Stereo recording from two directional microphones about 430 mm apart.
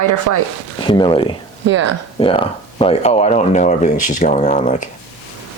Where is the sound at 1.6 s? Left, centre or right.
Right.